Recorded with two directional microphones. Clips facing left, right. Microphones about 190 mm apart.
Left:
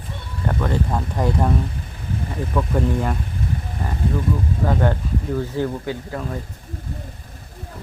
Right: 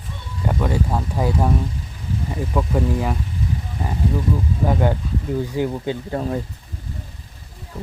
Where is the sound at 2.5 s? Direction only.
10° right (ahead or behind).